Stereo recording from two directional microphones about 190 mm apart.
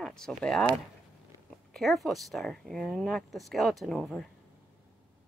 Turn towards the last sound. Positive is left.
turn(degrees=0)  # may be behind; listen again after turning